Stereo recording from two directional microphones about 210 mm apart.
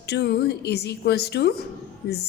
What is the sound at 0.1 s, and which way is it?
A woman's voice, 50° left (ahead or behind).